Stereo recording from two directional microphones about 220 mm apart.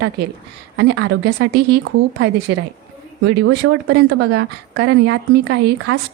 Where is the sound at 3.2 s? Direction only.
55° right (ahead or behind).